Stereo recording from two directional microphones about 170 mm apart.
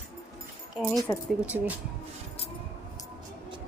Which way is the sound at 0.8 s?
Centre (ahead or behind).